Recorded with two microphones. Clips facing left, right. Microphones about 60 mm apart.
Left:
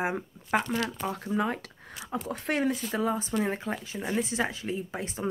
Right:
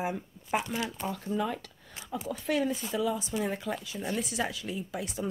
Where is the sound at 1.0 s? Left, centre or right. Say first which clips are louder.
Left 1 dB; left.